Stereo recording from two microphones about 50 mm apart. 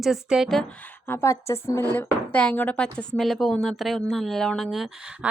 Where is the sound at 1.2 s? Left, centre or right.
Left.